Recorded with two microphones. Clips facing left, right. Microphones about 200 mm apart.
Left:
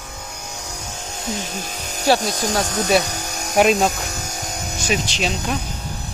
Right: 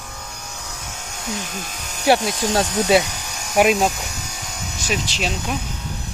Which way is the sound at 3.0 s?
45° left (ahead or behind).